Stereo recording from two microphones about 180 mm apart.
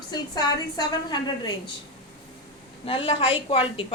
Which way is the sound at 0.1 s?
25° left (ahead or behind).